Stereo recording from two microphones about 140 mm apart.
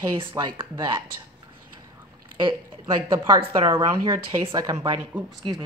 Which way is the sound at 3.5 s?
20° right (ahead or behind).